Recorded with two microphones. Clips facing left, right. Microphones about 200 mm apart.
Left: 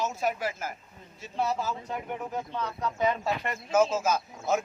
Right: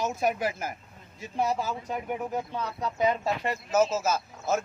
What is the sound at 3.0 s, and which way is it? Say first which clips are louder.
Speech: right 2 dB; 35° right (ahead or behind).